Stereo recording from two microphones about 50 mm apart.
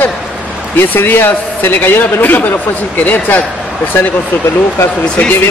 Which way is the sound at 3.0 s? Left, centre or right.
Left.